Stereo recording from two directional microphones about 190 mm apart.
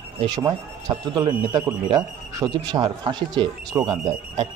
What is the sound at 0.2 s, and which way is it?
Speech, 20° right (ahead or behind).